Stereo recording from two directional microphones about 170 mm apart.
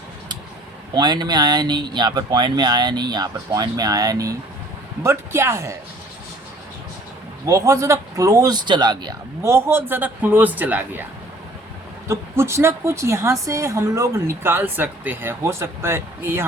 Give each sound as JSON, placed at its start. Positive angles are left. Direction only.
{"t": 0.9, "sound": "a woman's voice", "side_deg": -25}
{"t": 7.4, "sound": "a woman's voice", "side_deg": -20}
{"t": 12.0, "sound": "a woman's voice", "side_deg": -15}